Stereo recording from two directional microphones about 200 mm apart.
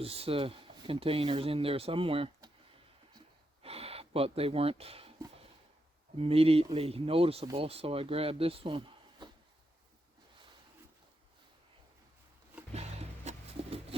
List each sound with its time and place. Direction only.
0.0 s speech: 30° right (ahead or behind)
3.6 s a sound: 30° right (ahead or behind)
6.1 s speech: 30° right (ahead or behind)
12.7 s music: 30° right (ahead or behind)